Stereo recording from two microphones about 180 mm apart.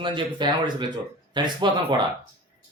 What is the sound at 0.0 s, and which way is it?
Speech, 25° right (ahead or behind).